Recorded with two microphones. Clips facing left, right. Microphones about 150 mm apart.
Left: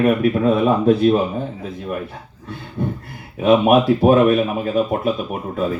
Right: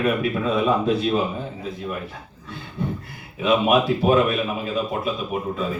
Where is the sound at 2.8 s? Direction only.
50° left (ahead or behind).